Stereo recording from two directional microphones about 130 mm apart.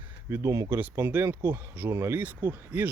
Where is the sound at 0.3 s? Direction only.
20° right (ahead or behind).